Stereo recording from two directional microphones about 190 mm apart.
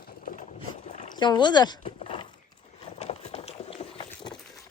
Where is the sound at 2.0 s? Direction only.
25° left (ahead or behind).